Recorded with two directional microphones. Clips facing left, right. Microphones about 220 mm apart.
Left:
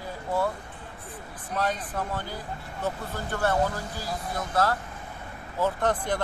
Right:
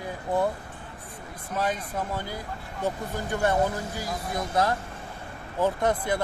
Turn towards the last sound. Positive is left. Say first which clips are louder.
# right 1 dB
turn(degrees=-10)  # may be behind; listen again after turning